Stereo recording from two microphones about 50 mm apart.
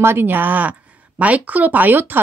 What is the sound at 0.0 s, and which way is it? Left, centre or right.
A woman's voice, right.